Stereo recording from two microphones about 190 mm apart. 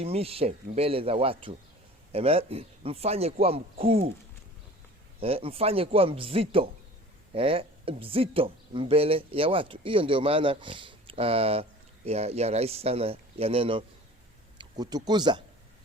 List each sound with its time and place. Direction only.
0.0 s speech: 30° right (ahead or behind)
5.2 s speech: 30° right (ahead or behind)